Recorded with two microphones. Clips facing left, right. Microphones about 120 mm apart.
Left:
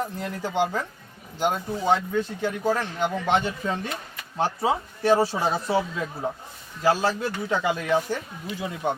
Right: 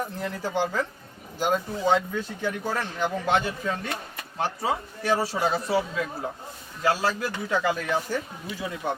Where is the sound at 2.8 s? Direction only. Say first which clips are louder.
Left 1 dB; 20° left (ahead or behind).